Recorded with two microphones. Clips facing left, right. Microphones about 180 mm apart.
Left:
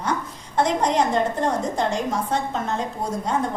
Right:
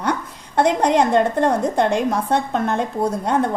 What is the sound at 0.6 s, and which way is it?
A woman's voice, 65° right (ahead or behind).